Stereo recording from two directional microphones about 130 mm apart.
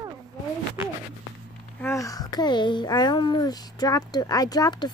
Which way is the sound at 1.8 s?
25° left (ahead or behind).